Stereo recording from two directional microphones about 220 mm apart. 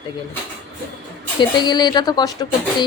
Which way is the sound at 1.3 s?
20° left (ahead or behind).